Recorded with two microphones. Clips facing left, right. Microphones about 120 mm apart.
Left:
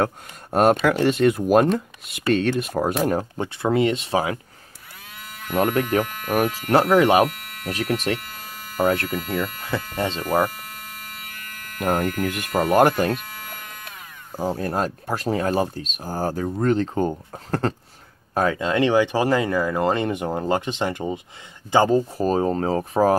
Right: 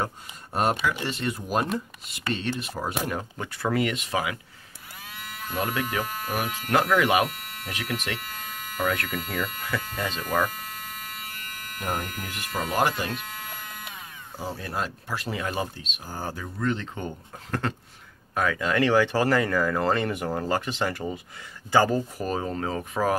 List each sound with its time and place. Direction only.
0.5 s speech: 55° left (ahead or behind)
3.1 s speech: 30° left (ahead or behind)
5.5 s speech: 45° left (ahead or behind)
6.6 s speech: 35° left (ahead or behind)
11.8 s speech: 55° left (ahead or behind)
14.3 s speech: 45° left (ahead or behind)